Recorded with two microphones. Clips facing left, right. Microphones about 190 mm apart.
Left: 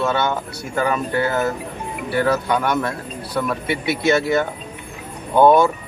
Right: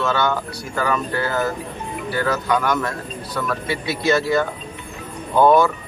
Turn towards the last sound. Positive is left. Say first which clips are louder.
# left 1 dB
turn(degrees=25)  # may be behind; listen again after turning